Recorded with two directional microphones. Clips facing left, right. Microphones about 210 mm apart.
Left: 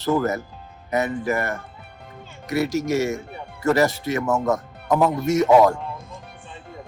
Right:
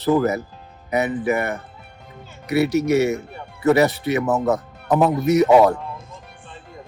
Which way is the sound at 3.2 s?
Centre (ahead or behind).